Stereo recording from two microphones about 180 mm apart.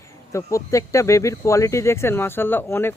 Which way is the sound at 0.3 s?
15° left (ahead or behind).